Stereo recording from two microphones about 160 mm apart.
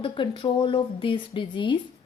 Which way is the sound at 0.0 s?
30° left (ahead or behind).